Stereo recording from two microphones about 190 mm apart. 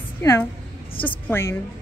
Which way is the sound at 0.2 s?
15° left (ahead or behind).